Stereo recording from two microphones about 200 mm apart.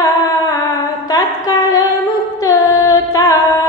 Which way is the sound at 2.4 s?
15° left (ahead or behind).